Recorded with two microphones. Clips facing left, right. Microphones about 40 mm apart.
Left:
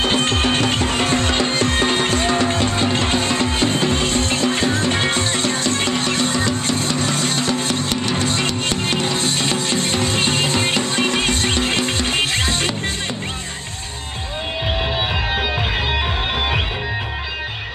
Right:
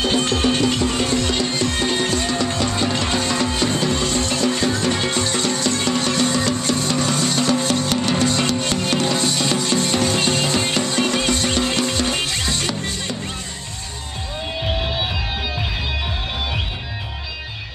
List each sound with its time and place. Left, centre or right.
0.0 s music: left
5.9 s music: left
7.5 s music: left
7.9 s music: centre
8.9 s music: centre
9.2 s music: left
14.7 s music: centre
15.3 s music: left